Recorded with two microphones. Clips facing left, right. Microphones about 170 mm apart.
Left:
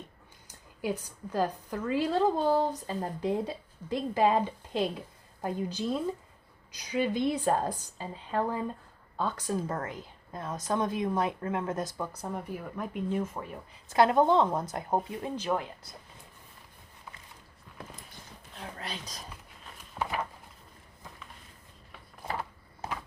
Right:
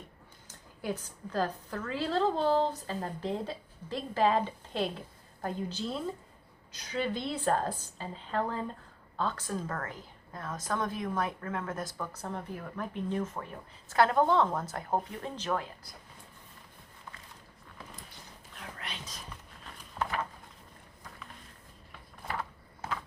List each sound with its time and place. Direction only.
0.4 s a woman's voice: 15° left (ahead or behind)
18.8 s speech: 35° left (ahead or behind)
20.0 s a sound: 15° left (ahead or behind)
22.4 s mechanisms: 15° left (ahead or behind)